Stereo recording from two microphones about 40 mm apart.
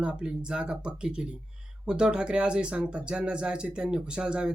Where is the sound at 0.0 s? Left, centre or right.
Right.